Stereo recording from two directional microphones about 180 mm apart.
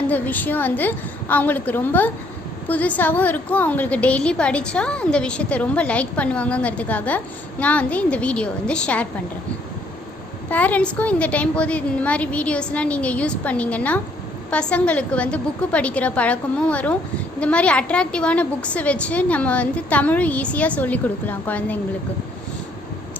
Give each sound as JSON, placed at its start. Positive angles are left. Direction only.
{"t": 0.1, "sound": "a woman's voice", "side_deg": 10}
{"t": 10.5, "sound": "a woman's voice", "side_deg": 10}